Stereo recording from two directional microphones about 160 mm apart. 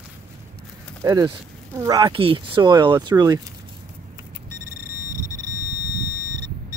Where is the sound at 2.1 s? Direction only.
35° right (ahead or behind).